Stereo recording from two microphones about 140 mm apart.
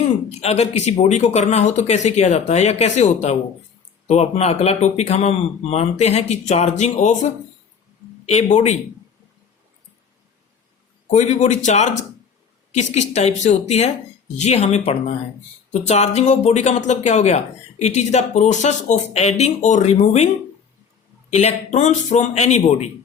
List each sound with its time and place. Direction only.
0.3 s a man's voice: 50° left (ahead or behind)
8.3 s a man's voice: 55° left (ahead or behind)
11.1 s a man's voice: 55° left (ahead or behind)
21.2 s speech: 55° left (ahead or behind)